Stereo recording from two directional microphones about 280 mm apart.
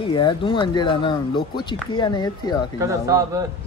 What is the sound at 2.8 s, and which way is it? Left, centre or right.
Speech, centre.